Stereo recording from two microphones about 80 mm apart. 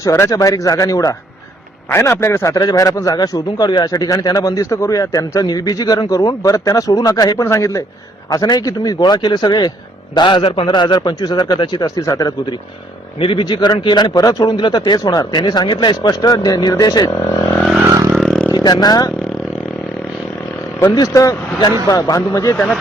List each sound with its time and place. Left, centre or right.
0.0 s a man's voice: left
1.9 s a man's voice: left
2.5 s a man's voice: left
8.3 s a man's voice: left
10.2 s a man's voice: left
13.2 s a man's voice: left
15.2 s a man's voice: left
18.5 s speech: left
20.9 s a man's voice: left
21.6 s a man's voice: left
22.5 s speech: centre